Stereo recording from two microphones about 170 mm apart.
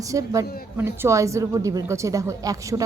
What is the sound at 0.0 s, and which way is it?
A woman's voice, 20° right (ahead or behind).